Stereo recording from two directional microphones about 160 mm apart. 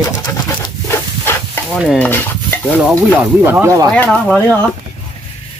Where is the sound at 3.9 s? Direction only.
5° left (ahead or behind).